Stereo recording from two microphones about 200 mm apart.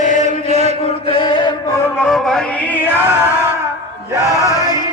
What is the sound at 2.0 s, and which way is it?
Music, centre (ahead or behind).